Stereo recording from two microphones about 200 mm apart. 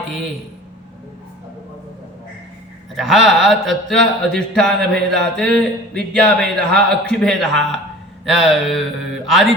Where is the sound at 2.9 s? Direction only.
Centre (ahead or behind).